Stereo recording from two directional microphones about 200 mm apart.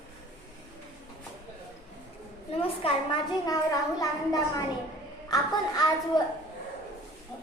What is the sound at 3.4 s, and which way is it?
A child's voice, 15° left (ahead or behind).